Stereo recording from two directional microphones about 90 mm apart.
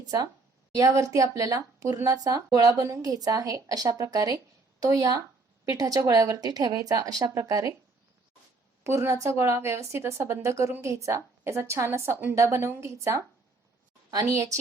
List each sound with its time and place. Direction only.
0.0 s a woman's voice: 45° right (ahead or behind)
8.8 s speech: 30° right (ahead or behind)